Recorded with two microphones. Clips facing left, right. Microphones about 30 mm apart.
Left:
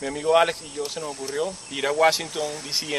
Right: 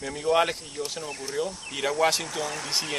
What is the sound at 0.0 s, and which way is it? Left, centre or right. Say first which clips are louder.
Speech: left 4 dB; centre.